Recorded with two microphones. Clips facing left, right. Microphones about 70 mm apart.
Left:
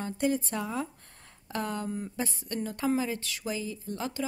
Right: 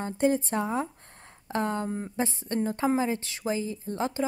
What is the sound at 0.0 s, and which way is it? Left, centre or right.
A woman's voice, right.